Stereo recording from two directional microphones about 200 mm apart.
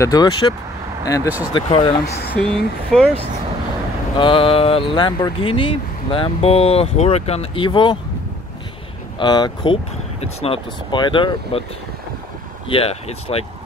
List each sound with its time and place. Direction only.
0.0 s speech: 20° left (ahead or behind)
2.0 s speech: 55° left (ahead or behind)
2.4 s speech: centre (ahead or behind)
4.2 s speech: 25° left (ahead or behind)
9.2 s speech: 20° left (ahead or behind)
12.6 s speech: 30° left (ahead or behind)